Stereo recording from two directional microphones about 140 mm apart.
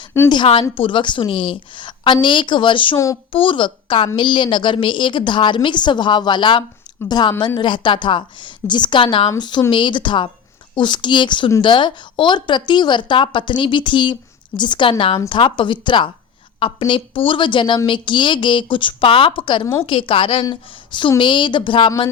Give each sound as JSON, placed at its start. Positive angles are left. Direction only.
{"t": 0.3, "sound": "speech", "side_deg": 35}